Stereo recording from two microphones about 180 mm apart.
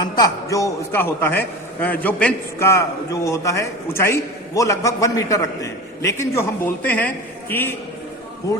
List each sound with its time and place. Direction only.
0.0 s a man's voice: 20° left (ahead or behind)